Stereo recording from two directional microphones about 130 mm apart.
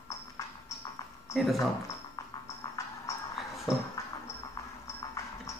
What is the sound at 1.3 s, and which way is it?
Speech, centre (ahead or behind).